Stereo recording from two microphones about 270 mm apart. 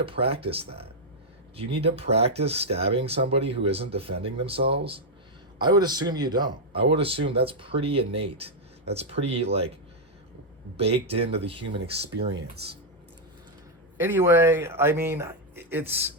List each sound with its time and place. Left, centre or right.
0.0 s speech: right
10.8 s speech: right
12.3 s speech: right
14.0 s speech: centre